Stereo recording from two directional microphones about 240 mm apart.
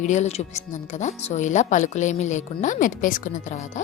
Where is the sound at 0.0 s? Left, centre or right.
Left.